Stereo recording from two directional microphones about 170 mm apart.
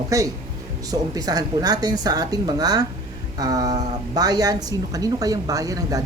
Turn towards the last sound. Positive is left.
turn(degrees=-20)  # may be behind; listen again after turning